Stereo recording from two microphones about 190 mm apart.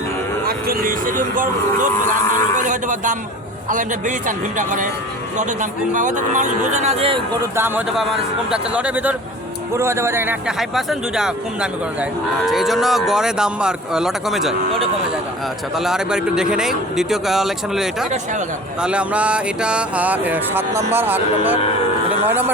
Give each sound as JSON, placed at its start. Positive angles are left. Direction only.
{"t": 0.4, "sound": "a man's voice", "side_deg": -50}
{"t": 5.9, "sound": "speech", "side_deg": -40}
{"t": 7.5, "sound": "a sound", "side_deg": -10}
{"t": 10.6, "sound": "a man's voice", "side_deg": 0}
{"t": 15.8, "sound": "a man's voice", "side_deg": -5}
{"t": 18.8, "sound": "a sound", "side_deg": -5}